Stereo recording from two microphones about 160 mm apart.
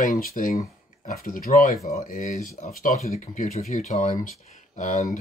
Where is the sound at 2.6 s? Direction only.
45° left (ahead or behind).